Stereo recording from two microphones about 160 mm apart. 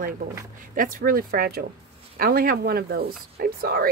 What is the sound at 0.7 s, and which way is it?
Speech, 65° right (ahead or behind).